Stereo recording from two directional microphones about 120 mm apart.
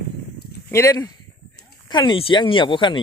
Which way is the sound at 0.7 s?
25° left (ahead or behind).